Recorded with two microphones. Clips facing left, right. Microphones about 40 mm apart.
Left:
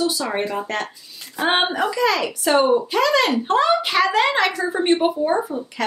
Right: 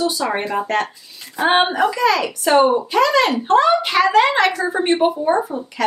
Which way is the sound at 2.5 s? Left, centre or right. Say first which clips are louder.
Right 3 dB; centre.